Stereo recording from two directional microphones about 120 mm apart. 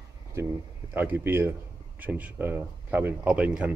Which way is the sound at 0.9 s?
15° right (ahead or behind).